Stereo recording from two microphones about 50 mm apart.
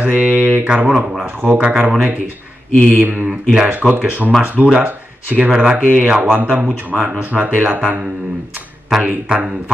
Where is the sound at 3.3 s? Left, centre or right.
Centre.